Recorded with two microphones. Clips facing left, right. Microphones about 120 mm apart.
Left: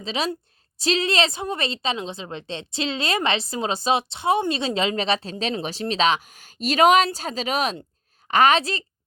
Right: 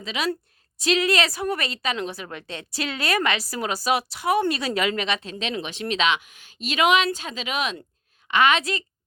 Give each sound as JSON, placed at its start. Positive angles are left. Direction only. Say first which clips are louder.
{"t": 0.0, "sound": "a woman's voice", "louder": "left 1 dB", "side_deg": 30}